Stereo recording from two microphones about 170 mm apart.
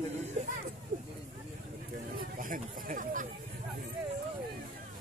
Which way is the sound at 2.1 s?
55° right (ahead or behind).